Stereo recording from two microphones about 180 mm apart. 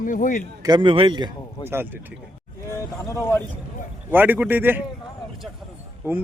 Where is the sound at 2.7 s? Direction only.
15° left (ahead or behind).